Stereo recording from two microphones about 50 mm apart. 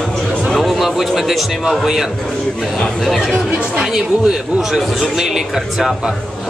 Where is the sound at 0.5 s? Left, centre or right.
Centre.